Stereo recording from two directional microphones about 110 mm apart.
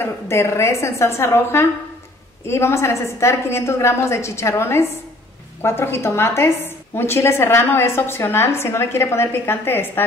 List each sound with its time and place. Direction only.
0.0 s a woman's voice: 25° left (ahead or behind)